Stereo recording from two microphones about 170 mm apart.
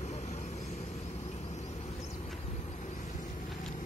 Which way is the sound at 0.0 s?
40° left (ahead or behind).